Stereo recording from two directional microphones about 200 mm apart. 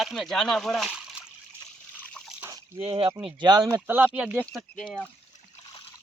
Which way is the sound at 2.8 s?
30° right (ahead or behind).